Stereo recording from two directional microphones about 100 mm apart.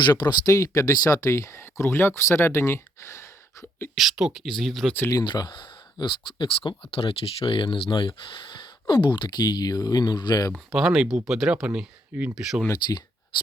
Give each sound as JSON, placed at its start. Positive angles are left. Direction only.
{"t": 0.0, "sound": "speech", "side_deg": 45}
{"t": 3.9, "sound": "speech", "side_deg": -5}
{"t": 5.1, "sound": "speech", "side_deg": 45}
{"t": 6.9, "sound": "speech", "side_deg": 70}
{"t": 10.5, "sound": "speech", "side_deg": -5}